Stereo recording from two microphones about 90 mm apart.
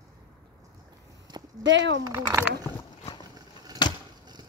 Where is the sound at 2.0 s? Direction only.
35° right (ahead or behind).